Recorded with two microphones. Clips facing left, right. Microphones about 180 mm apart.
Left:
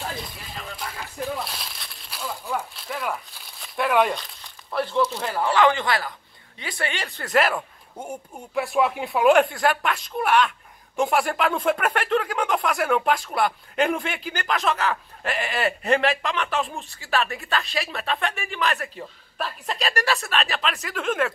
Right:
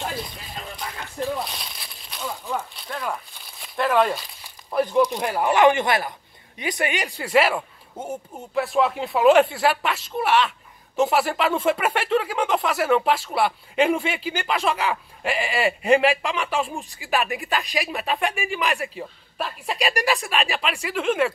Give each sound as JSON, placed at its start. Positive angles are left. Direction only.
{"t": 0.7, "sound": "a sound", "side_deg": 0}
{"t": 2.8, "sound": "crumpling", "side_deg": 5}
{"t": 4.6, "sound": "speech", "side_deg": -15}